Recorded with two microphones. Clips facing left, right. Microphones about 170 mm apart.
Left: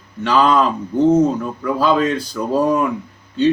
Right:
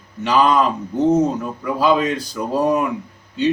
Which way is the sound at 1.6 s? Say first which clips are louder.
Left 1 dB; 15° right (ahead or behind).